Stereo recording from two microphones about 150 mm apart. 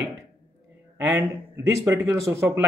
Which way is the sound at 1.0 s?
15° right (ahead or behind).